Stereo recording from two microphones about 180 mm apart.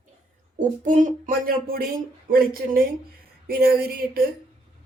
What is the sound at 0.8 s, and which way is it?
A woman's voice, 45° right (ahead or behind).